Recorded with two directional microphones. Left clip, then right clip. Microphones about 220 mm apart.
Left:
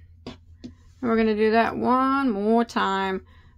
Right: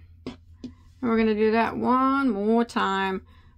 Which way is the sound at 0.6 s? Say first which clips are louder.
Left 1 dB; centre (ahead or behind).